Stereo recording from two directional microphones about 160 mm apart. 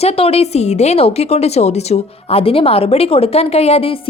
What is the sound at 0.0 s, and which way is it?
A woman's voice, 40° left (ahead or behind).